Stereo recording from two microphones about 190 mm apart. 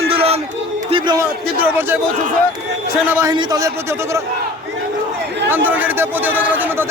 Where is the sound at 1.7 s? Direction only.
10° right (ahead or behind).